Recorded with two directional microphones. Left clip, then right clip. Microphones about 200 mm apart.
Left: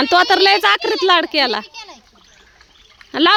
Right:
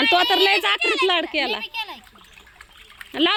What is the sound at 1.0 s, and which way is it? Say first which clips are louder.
Speech: left 7 dB; 25° left (ahead or behind).